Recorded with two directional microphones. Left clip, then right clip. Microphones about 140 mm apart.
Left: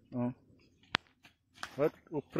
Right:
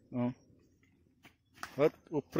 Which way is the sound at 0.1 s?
15° right (ahead or behind).